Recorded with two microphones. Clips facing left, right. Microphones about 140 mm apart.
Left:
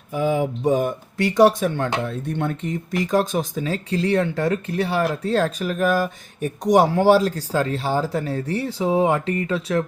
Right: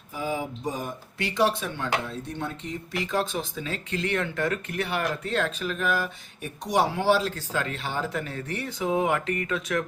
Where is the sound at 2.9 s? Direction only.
40° left (ahead or behind).